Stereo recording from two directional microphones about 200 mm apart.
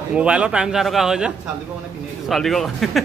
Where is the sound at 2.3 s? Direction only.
Centre (ahead or behind).